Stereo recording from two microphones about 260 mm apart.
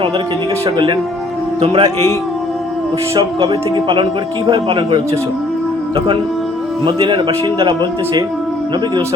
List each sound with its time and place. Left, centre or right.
0.6 s speech: centre
3.2 s speech: centre
6.8 s speech: centre